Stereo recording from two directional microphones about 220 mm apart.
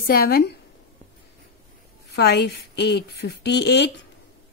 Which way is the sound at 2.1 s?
50° left (ahead or behind).